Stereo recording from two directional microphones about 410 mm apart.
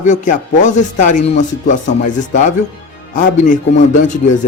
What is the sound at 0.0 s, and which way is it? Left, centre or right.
Speech, centre.